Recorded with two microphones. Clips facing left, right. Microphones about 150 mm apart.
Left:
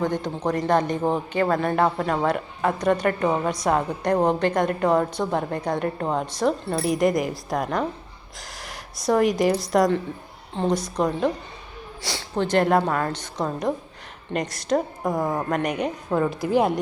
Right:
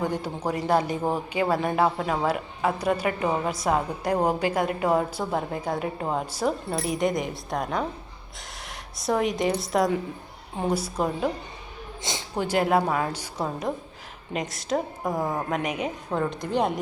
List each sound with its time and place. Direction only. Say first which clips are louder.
0.0 s a man's voice: left 3 dB; 10° right (ahead or behind)
12.0 s a woman's voice: left 3 dB; 20° right (ahead or behind)
12.5 s a man's voice: left 2 dB; 5° right (ahead or behind)